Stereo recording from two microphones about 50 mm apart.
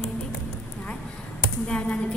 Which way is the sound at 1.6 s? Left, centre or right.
Centre.